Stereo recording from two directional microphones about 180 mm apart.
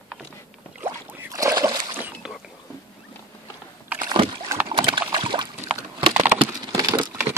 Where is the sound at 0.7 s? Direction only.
10° right (ahead or behind).